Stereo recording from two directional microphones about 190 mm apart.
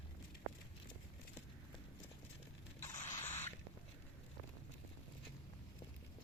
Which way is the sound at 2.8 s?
15° left (ahead or behind).